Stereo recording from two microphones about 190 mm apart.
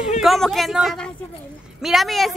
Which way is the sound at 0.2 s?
Centre (ahead or behind).